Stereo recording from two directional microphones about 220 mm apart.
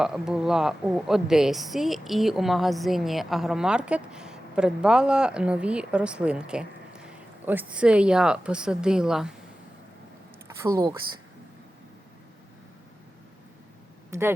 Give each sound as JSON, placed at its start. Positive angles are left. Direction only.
{"t": 0.0, "sound": "speech", "side_deg": 0}
{"t": 10.6, "sound": "speech", "side_deg": -15}
{"t": 14.1, "sound": "speech", "side_deg": -10}